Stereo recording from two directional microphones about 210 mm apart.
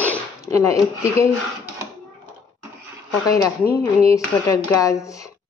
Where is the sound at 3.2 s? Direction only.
15° left (ahead or behind).